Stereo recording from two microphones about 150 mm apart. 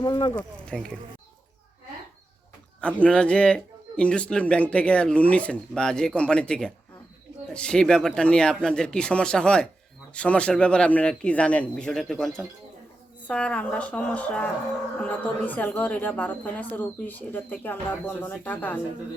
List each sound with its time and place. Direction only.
0.0 s speech: 30° left (ahead or behind)
0.7 s speech: 5° left (ahead or behind)
2.8 s speech: 10° left (ahead or behind)